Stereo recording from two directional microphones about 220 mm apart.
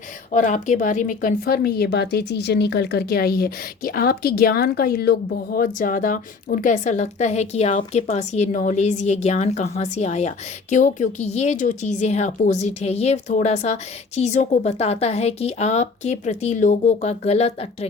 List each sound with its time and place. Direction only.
0.3 s a woman's voice: 35° left (ahead or behind)